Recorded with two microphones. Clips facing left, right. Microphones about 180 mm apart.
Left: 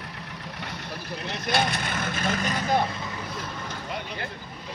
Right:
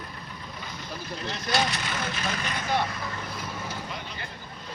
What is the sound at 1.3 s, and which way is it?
Speech, 60° left (ahead or behind).